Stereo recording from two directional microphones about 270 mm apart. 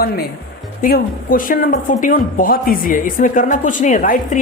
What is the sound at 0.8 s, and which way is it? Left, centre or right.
Speech, left.